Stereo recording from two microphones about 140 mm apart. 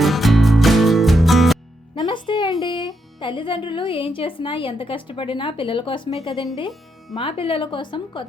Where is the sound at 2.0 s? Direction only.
35° left (ahead or behind).